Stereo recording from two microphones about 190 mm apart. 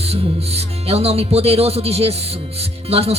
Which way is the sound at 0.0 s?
30° right (ahead or behind).